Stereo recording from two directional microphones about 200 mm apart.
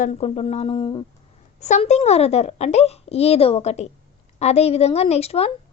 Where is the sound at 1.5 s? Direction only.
35° left (ahead or behind).